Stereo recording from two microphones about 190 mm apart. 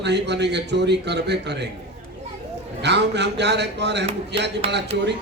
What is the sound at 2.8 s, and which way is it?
A man's voice, 65° right (ahead or behind).